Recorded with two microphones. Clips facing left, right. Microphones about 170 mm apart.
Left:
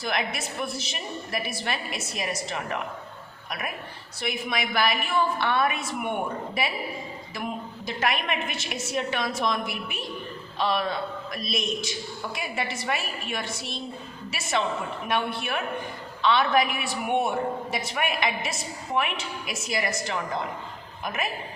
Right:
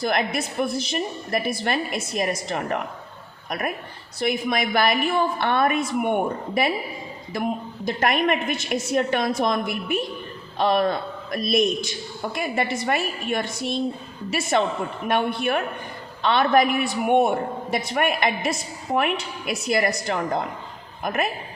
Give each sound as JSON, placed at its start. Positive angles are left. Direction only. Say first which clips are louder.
{"t": 0.0, "sound": "a woman's voice", "louder": "right 6 dB", "side_deg": -50}
{"t": 4.2, "sound": "a woman's voice", "louder": "right 6 dB", "side_deg": -45}